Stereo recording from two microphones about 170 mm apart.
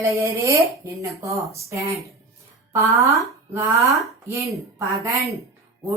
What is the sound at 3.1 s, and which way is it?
Speech, 20° right (ahead or behind).